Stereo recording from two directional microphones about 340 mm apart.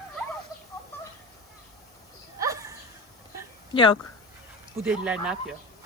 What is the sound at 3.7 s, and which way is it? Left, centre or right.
Speech, centre.